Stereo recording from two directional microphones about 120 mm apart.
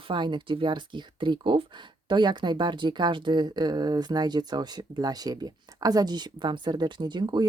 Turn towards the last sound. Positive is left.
turn(degrees=-40)  # may be behind; listen again after turning